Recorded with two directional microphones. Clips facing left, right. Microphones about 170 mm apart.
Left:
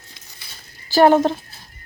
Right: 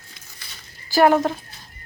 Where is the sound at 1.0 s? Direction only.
30° left (ahead or behind).